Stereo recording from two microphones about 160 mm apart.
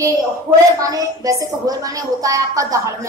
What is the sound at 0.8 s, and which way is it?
A woman's voice, 20° right (ahead or behind).